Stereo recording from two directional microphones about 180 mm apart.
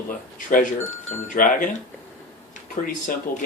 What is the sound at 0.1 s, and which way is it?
Speech, 50° left (ahead or behind).